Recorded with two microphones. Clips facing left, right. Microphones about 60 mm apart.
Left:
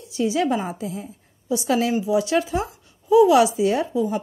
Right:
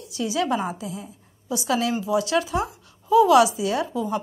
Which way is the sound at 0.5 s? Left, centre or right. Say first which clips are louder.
Even; right.